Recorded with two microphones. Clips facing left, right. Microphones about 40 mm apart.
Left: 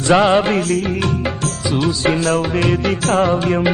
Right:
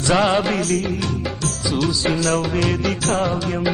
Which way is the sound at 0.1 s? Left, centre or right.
Left.